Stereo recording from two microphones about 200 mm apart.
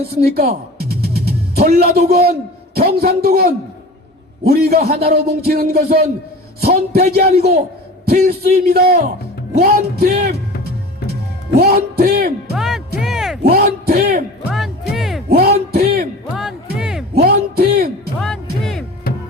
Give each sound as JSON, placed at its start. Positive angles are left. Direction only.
{"t": 0.3, "sound": "music", "side_deg": -50}
{"t": 1.5, "sound": "a man's voice", "side_deg": -50}
{"t": 11.5, "sound": "a man's voice", "side_deg": -50}
{"t": 12.5, "sound": "music", "side_deg": 0}
{"t": 13.4, "sound": "a sound", "side_deg": -50}
{"t": 14.5, "sound": "music", "side_deg": 0}
{"t": 15.3, "sound": "a sound", "side_deg": -50}
{"t": 16.7, "sound": "a sound", "side_deg": -5}
{"t": 17.2, "sound": "music", "side_deg": -50}
{"t": 18.6, "sound": "music", "side_deg": 0}